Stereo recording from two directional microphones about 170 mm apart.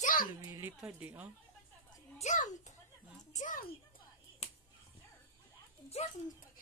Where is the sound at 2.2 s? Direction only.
45° left (ahead or behind).